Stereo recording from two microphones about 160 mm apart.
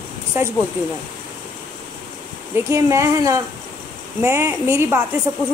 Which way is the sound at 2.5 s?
20° right (ahead or behind).